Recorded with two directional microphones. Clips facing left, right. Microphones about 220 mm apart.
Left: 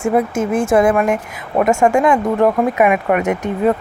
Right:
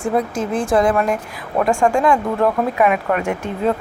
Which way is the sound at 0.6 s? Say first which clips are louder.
Left 3 dB; 25° left (ahead or behind).